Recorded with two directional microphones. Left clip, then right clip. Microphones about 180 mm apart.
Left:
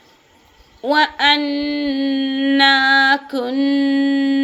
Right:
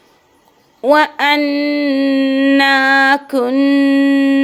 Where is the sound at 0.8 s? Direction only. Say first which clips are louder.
Right 4 dB; 40° right (ahead or behind).